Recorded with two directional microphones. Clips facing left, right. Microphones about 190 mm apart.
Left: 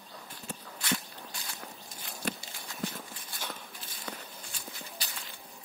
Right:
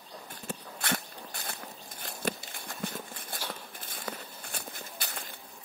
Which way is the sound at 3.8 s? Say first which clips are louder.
Right 3 dB; 55° right (ahead or behind).